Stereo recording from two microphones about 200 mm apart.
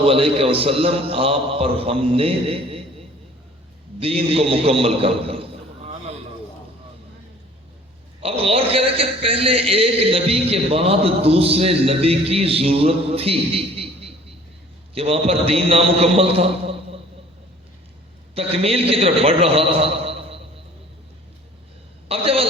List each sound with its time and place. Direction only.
0.0 s a man's voice: 30° right (ahead or behind)
4.0 s a man's voice: 30° right (ahead or behind)
8.2 s a man's voice: 30° right (ahead or behind)
18.3 s a man's voice: 30° right (ahead or behind)
22.1 s a woman's voice: 30° right (ahead or behind)